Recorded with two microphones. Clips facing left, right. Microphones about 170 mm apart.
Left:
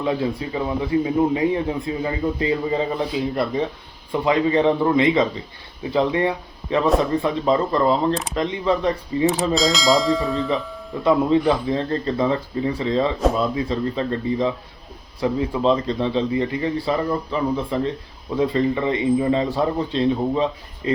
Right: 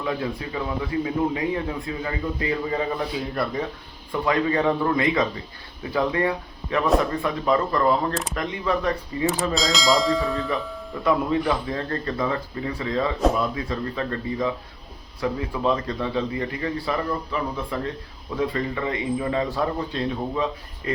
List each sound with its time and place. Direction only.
0.0 s speech: 25° left (ahead or behind)
9.2 s speech: centre (ahead or behind)
11.0 s speech: 25° left (ahead or behind)